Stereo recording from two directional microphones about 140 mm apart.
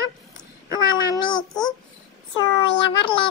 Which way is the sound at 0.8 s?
30° left (ahead or behind).